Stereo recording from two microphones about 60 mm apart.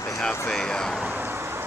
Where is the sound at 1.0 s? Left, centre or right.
Right.